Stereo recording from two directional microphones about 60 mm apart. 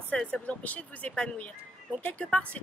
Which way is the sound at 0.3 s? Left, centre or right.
Left.